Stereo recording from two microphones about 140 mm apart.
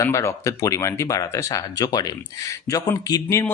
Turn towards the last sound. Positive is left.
turn(degrees=25)  # may be behind; listen again after turning